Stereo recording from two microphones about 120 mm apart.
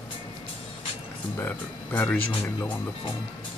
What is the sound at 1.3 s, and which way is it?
Speech, 15° left (ahead or behind).